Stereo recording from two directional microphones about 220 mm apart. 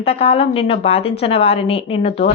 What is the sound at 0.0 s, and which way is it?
A woman's voice, 25° left (ahead or behind).